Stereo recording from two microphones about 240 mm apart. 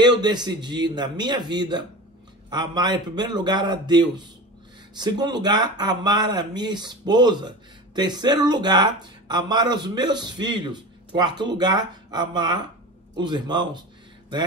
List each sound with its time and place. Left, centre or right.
0.0 s a man's voice: centre